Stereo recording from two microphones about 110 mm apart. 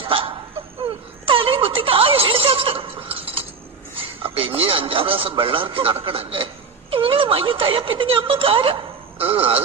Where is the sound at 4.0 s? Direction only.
55° right (ahead or behind).